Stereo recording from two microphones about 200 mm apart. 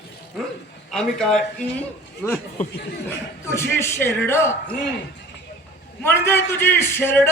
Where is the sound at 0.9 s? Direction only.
5° left (ahead or behind).